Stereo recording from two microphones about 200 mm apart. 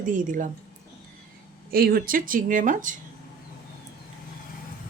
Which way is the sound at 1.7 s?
50° right (ahead or behind).